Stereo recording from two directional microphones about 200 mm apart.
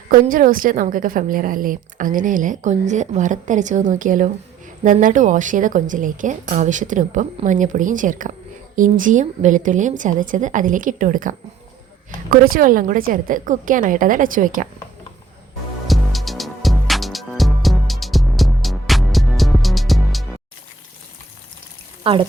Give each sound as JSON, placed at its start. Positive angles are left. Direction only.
{"t": 0.1, "sound": "a woman's voice", "side_deg": -40}
{"t": 15.9, "sound": "music", "side_deg": 0}
{"t": 22.0, "sound": "speech", "side_deg": -25}